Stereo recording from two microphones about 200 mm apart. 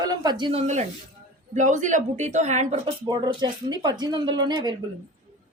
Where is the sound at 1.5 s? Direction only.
40° right (ahead or behind).